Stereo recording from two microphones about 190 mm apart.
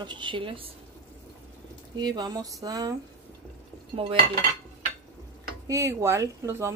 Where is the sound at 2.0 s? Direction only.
20° right (ahead or behind).